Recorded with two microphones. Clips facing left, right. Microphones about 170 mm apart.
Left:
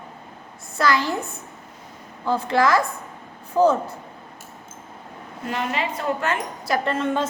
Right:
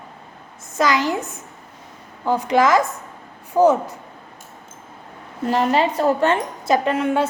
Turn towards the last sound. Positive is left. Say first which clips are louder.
# right 4 dB
turn(degrees=-10)  # may be behind; listen again after turning